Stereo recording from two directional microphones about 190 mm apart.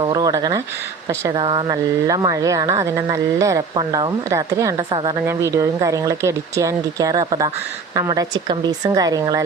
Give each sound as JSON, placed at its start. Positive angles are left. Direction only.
{"t": 0.0, "sound": "speech", "side_deg": -20}